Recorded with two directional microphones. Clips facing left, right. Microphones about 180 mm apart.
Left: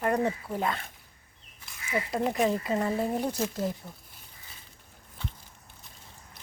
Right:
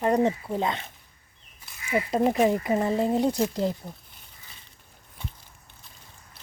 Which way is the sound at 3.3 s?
30° right (ahead or behind).